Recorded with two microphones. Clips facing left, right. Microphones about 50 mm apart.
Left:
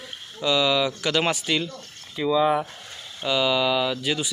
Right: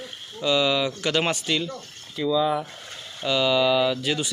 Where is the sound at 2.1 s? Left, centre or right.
Left.